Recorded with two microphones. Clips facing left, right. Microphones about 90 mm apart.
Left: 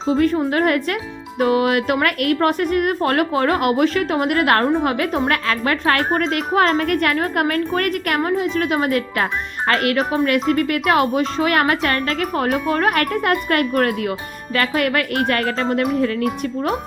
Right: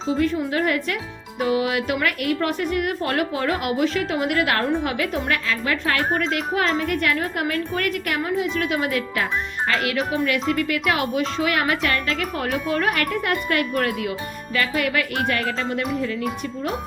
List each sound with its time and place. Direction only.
0.1 s speech: 50° left (ahead or behind)
5.5 s speech: 50° left (ahead or behind)